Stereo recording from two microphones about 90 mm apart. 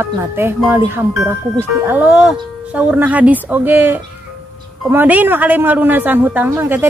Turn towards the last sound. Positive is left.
turn(degrees=-25)  # may be behind; listen again after turning